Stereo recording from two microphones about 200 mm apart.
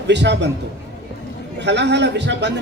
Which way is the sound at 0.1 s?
60° right (ahead or behind).